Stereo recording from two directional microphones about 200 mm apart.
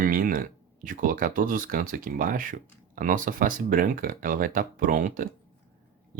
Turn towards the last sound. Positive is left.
turn(degrees=-40)  # may be behind; listen again after turning